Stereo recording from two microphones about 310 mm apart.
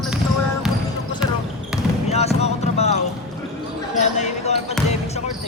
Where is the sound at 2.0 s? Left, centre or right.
Left.